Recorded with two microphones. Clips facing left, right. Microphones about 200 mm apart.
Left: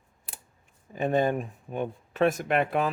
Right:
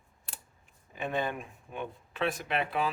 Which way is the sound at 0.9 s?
40° left (ahead or behind).